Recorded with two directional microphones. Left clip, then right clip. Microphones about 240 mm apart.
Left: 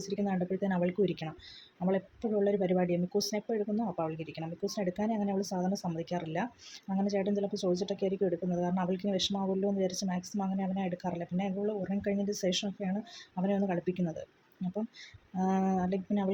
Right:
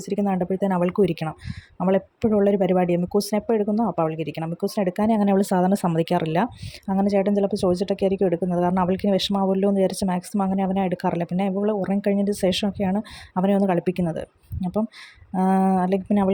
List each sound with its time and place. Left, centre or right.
0.0 s speech: right
15.4 s speech: right